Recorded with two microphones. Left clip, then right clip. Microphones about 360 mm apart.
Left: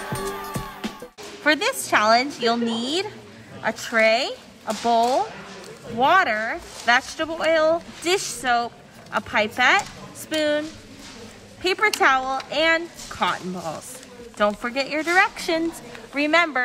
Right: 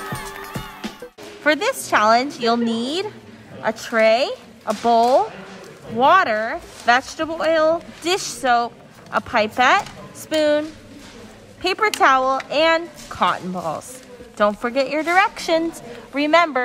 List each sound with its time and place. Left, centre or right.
0.0 s music: centre
1.4 s a woman's voice: centre
11.6 s speech: centre